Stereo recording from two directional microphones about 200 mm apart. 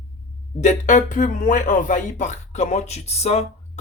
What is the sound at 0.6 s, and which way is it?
Speech, 40° left (ahead or behind).